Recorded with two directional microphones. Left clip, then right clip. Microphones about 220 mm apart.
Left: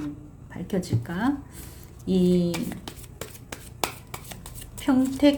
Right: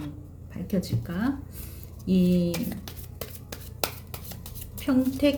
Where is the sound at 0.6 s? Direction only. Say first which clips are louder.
Left 2 dB; centre (ahead or behind).